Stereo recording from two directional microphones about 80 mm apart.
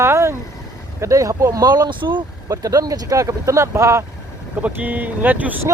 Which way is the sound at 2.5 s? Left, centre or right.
Right.